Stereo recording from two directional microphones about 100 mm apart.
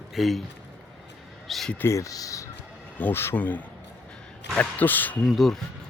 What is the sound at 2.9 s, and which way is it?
Speech, 20° left (ahead or behind).